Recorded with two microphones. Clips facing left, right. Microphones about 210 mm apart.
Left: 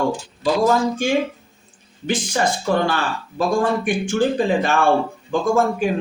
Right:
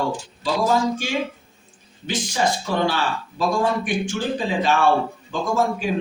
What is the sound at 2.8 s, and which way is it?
Speech, 50° left (ahead or behind).